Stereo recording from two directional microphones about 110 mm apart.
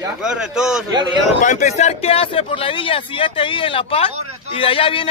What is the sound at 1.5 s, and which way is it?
Speech, 90° left.